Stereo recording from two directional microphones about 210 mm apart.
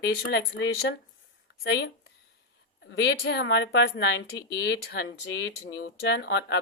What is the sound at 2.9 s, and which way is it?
A woman's voice, 60° left (ahead or behind).